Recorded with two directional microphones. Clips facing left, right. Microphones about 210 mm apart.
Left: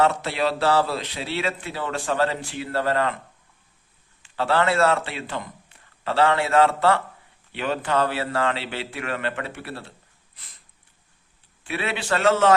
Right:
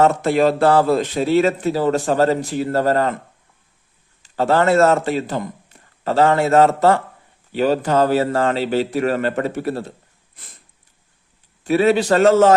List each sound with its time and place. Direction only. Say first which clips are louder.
0.0 s speech: right 7 dB; 45° right (ahead or behind)
4.2 s a man's voice: right 5 dB; 45° right (ahead or behind)
10.3 s sniff: right 7 dB; 50° right (ahead or behind)
11.6 s a man's voice: right 14 dB; 40° right (ahead or behind)